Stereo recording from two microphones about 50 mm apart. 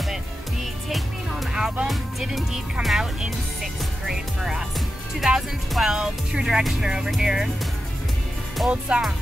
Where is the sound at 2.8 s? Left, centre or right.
Right.